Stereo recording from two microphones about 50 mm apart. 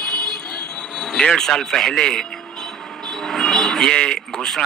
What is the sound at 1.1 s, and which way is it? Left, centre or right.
Speech, centre.